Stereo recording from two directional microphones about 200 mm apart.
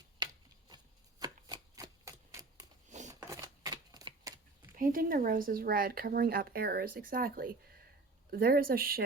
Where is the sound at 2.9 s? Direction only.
35° right (ahead or behind).